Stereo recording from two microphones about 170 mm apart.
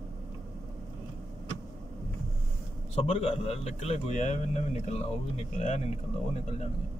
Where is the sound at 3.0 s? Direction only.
40° left (ahead or behind).